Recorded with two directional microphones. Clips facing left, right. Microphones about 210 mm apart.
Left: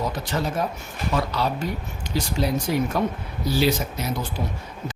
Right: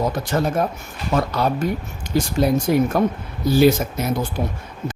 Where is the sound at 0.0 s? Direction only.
50° right (ahead or behind).